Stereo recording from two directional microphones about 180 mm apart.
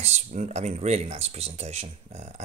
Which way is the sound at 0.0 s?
40° right (ahead or behind).